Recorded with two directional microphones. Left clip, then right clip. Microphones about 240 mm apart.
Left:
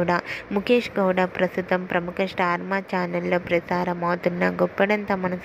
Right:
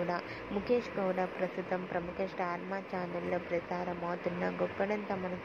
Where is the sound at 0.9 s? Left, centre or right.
Left.